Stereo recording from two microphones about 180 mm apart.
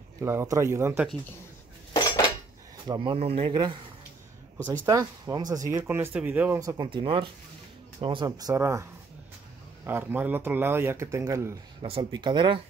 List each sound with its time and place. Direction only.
0.2 s speech: 15° right (ahead or behind)
2.0 s cutlery: 25° left (ahead or behind)
2.9 s speech: 25° right (ahead or behind)
4.8 s speech: 20° right (ahead or behind)
6.6 s speech: 20° right (ahead or behind)
9.8 s speech: 10° right (ahead or behind); by 12.5 s 25° right (ahead or behind)